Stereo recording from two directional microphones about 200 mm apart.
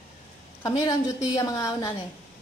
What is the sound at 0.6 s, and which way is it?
A woman's voice, 15° left (ahead or behind).